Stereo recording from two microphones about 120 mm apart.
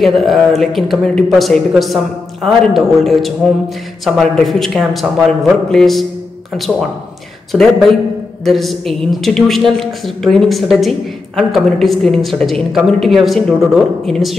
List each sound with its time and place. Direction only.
0.0 s speech: centre (ahead or behind)
7.5 s speech: 15° right (ahead or behind)
8.5 s speech: centre (ahead or behind)